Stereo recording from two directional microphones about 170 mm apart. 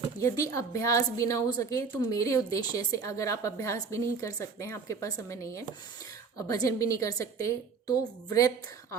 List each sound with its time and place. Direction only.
0.2 s a woman's voice: 20° left (ahead or behind)